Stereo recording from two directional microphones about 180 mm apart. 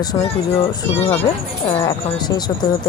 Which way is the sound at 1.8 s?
20° left (ahead or behind).